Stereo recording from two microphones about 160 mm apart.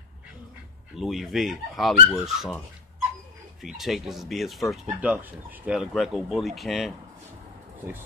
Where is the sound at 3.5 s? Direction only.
Centre (ahead or behind).